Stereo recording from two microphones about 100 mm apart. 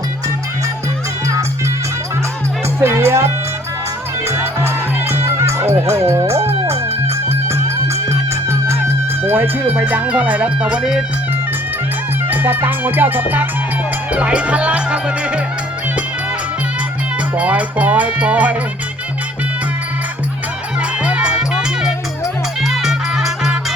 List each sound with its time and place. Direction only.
2.8 s music: 25° right (ahead or behind)
5.2 s music: 25° right (ahead or behind)
9.2 s speech: 20° right (ahead or behind)
12.3 s music: 20° right (ahead or behind)
14.1 s speech: 10° right (ahead or behind)
17.3 s speech: 15° right (ahead or behind)
21.0 s music: 10° right (ahead or behind)